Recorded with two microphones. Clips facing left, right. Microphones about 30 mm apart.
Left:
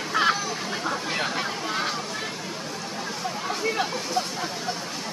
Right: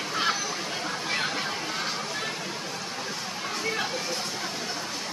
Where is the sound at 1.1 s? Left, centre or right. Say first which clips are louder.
Right 2 dB; centre.